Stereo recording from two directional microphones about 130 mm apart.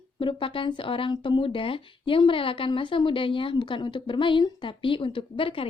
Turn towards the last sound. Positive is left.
turn(degrees=40)  # may be behind; listen again after turning